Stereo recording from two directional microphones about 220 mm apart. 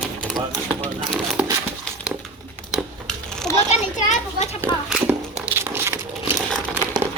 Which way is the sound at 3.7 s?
35° left (ahead or behind).